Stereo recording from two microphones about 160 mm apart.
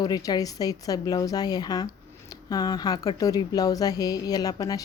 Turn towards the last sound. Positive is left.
turn(degrees=25)  # may be behind; listen again after turning